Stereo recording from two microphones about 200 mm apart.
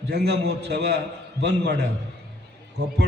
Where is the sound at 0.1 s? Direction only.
55° right (ahead or behind).